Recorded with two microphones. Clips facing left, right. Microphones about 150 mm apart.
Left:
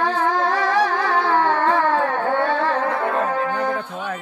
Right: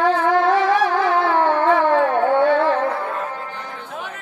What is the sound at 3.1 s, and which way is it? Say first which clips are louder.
Music: left 6 dB; 70° left (ahead or behind).